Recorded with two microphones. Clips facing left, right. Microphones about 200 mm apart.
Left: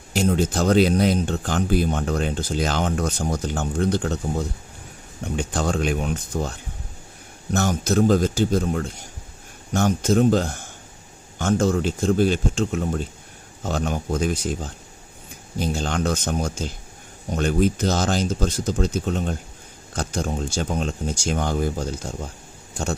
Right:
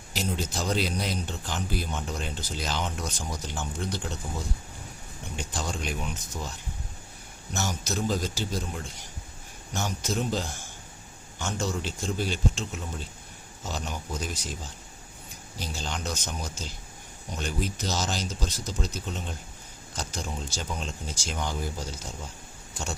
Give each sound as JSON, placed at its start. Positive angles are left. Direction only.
{"t": 0.3, "sound": "speech", "side_deg": 55}